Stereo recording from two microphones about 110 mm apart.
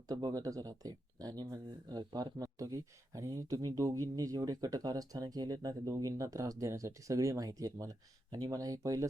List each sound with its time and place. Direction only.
0.1 s speech: 35° right (ahead or behind)